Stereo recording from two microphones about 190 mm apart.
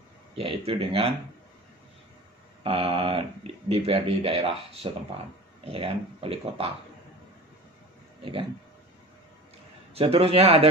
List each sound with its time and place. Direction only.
0.4 s speech: 30° right (ahead or behind)
2.6 s speech: 30° right (ahead or behind)
8.2 s speech: 30° right (ahead or behind)
9.9 s speech: 30° right (ahead or behind)